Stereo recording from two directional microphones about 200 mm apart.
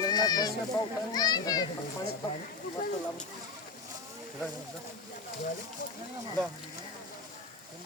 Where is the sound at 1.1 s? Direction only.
20° left (ahead or behind).